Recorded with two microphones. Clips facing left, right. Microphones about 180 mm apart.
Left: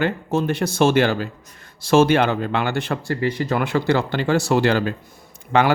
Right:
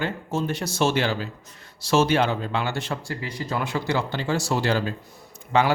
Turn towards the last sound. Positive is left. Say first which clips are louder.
# left 3 dB
turn(degrees=60)  # may be behind; listen again after turning